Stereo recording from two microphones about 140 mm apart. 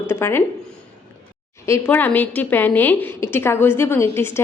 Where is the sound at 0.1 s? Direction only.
15° left (ahead or behind).